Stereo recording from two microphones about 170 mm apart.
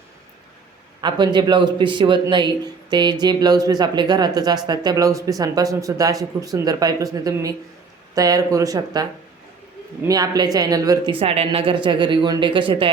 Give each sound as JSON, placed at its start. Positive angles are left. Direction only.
{"t": 1.0, "sound": "a man's voice", "side_deg": -25}
{"t": 10.1, "sound": "a man's voice", "side_deg": -20}
{"t": 11.1, "sound": "a man's voice", "side_deg": -35}